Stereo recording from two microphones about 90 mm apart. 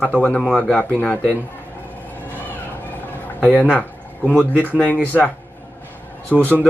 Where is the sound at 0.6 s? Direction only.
10° left (ahead or behind).